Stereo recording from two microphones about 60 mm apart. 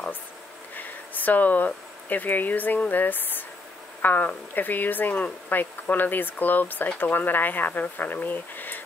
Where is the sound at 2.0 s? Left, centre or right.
Left.